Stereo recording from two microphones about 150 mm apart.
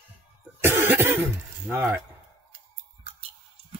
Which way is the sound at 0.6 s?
15° right (ahead or behind).